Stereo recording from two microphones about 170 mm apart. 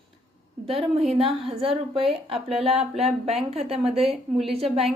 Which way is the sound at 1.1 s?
35° right (ahead or behind).